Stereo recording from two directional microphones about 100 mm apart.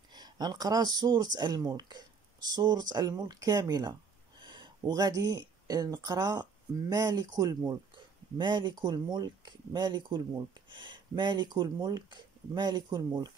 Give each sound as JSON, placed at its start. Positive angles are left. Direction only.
{"t": 0.1, "sound": "speech", "side_deg": -45}